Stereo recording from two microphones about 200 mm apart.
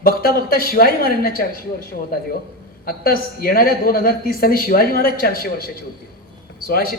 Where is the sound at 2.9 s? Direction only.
45° left (ahead or behind).